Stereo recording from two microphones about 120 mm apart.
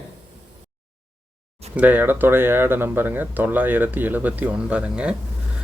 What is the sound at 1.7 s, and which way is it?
Speech, 15° right (ahead or behind).